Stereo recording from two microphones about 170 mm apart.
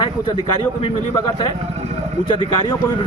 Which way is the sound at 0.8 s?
35° left (ahead or behind).